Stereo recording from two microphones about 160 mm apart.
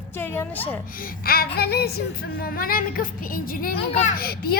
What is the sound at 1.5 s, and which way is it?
Speech, 80° left.